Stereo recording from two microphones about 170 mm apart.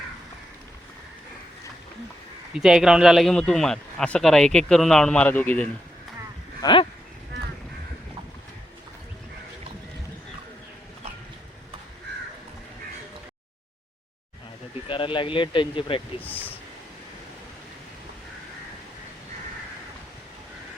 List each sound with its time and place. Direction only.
2.6 s speech: 5° right (ahead or behind)
6.6 s speech: 25° left (ahead or behind)
14.8 s speech: 30° left (ahead or behind)
16.2 s speech: 10° left (ahead or behind)